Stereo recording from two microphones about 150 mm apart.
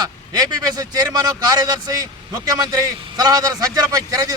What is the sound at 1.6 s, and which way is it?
Speech, 25° right (ahead or behind).